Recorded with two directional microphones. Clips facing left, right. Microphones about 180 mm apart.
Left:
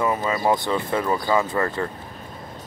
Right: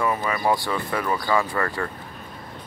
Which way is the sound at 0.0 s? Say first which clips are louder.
Left 2 dB; 20° left (ahead or behind).